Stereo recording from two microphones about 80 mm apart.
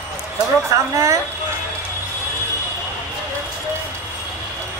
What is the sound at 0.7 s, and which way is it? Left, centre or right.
Speech, right.